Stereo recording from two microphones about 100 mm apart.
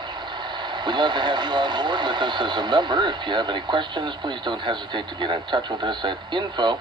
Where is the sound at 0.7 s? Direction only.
50° right (ahead or behind).